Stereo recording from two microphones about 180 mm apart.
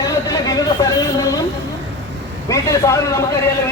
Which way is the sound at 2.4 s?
15° left (ahead or behind).